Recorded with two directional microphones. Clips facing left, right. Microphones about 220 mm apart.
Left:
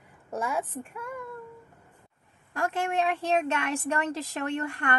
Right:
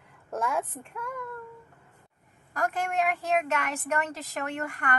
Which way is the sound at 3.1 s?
30° left (ahead or behind).